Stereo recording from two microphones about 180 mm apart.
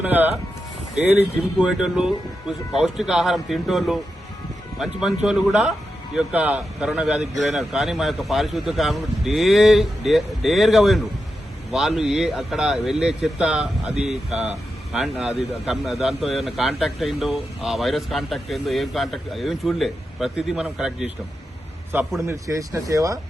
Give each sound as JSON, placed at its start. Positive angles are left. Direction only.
{"t": 0.0, "sound": "speech", "side_deg": -10}
{"t": 1.4, "sound": "a man's voice", "side_deg": -5}